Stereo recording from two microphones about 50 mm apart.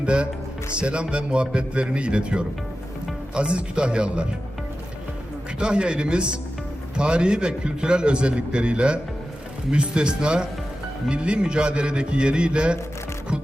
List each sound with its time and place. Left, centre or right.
0.0 s a man's voice: right
5.5 s a man's voice: right